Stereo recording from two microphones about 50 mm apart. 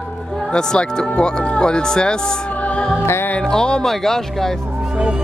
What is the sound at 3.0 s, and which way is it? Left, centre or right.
Music, left.